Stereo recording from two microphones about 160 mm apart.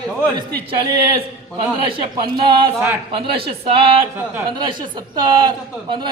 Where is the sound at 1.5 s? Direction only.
30° right (ahead or behind).